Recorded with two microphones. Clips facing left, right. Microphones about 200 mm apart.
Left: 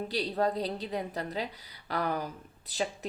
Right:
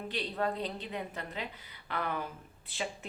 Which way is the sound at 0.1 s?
35° left (ahead or behind).